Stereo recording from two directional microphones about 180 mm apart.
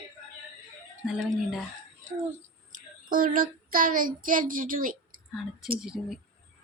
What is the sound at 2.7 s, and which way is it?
Child singing, 50° right (ahead or behind).